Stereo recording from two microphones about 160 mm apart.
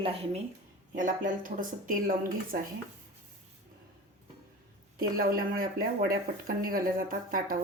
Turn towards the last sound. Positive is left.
turn(degrees=-60)  # may be behind; listen again after turning